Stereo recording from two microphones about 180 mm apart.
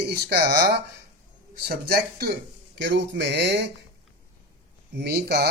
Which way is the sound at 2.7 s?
75° right (ahead or behind).